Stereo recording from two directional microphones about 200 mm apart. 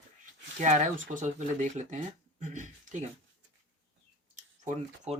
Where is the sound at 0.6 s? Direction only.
40° right (ahead or behind).